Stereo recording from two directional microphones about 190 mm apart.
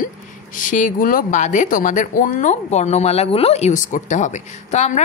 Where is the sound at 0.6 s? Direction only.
45° left (ahead or behind).